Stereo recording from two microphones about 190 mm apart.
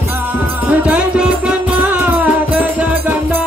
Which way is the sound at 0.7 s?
5° right (ahead or behind).